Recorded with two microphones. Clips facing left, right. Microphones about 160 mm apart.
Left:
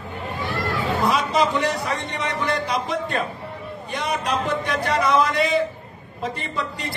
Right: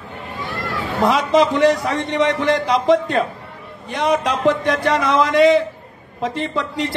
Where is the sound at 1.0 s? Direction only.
85° right.